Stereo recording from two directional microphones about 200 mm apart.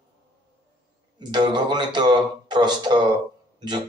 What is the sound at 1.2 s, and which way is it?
A man's voice, 20° right (ahead or behind).